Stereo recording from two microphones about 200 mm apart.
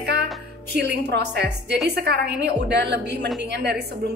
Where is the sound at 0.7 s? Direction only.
55° right (ahead or behind).